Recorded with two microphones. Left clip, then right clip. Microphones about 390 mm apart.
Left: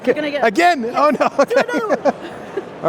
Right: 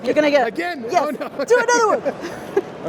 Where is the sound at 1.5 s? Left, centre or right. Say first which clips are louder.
Right 4 dB; right.